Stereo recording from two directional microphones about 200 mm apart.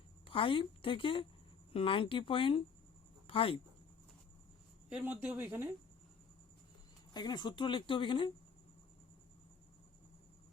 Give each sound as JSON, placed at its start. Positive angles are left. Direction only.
{"t": 0.3, "sound": "speech", "side_deg": 25}
{"t": 4.9, "sound": "speech", "side_deg": -5}
{"t": 7.1, "sound": "speech", "side_deg": 20}